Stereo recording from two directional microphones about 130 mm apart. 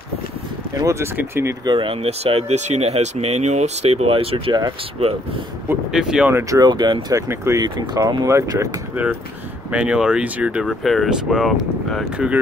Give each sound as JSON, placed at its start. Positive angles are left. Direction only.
{"t": 0.7, "sound": "speech", "side_deg": -25}
{"t": 1.6, "sound": "speech", "side_deg": -35}
{"t": 2.0, "sound": "speech", "side_deg": -50}
{"t": 5.9, "sound": "speech", "side_deg": -5}
{"t": 6.3, "sound": "speech", "side_deg": -30}
{"t": 7.2, "sound": "speech", "side_deg": -20}
{"t": 7.6, "sound": "speech", "side_deg": -30}
{"t": 9.7, "sound": "speech", "side_deg": -10}